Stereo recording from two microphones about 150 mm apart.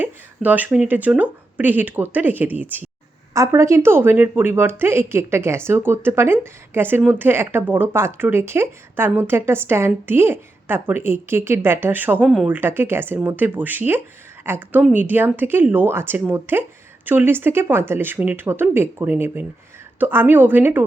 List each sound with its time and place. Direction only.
0.0 s speech: 10° right (ahead or behind)